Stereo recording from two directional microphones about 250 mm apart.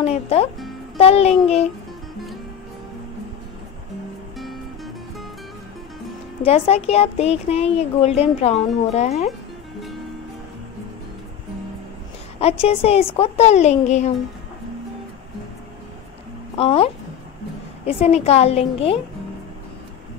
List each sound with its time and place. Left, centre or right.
0.0 s speech: left
6.4 s speech: left
12.4 s speech: left
16.5 s speech: left